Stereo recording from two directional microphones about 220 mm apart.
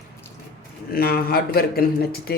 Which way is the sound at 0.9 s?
45° left (ahead or behind).